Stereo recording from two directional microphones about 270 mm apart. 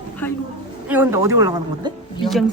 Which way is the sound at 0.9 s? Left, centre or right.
Centre.